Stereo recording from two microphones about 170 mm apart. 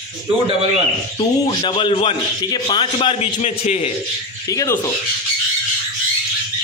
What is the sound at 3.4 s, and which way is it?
Speech, 40° left (ahead or behind).